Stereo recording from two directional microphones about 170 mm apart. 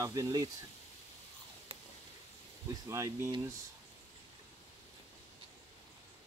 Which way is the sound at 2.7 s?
15° right (ahead or behind).